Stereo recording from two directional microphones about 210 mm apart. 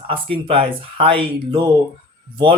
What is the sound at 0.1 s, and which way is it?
Speech, 25° right (ahead or behind).